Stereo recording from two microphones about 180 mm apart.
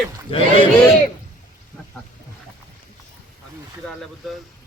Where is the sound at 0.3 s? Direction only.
30° left (ahead or behind).